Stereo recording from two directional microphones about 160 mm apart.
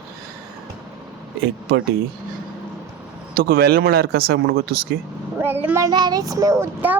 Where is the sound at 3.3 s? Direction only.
75° right (ahead or behind).